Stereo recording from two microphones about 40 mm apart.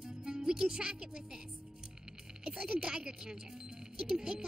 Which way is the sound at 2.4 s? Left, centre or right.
Centre.